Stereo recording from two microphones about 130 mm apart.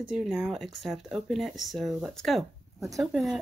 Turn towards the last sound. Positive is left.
turn(degrees=0)  # may be behind; listen again after turning